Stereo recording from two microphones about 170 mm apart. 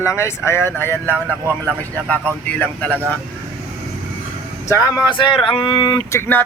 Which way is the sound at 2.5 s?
10° left (ahead or behind).